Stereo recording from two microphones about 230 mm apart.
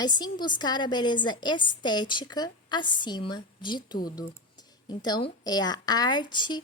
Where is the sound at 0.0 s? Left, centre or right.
Centre.